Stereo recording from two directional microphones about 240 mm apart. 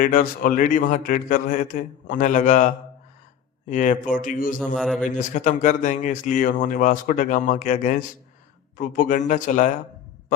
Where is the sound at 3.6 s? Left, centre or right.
Left.